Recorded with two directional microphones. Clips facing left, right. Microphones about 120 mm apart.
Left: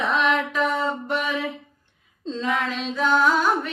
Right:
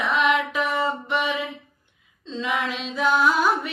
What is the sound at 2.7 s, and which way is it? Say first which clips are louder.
Music: left 2 dB; 40° left (ahead or behind).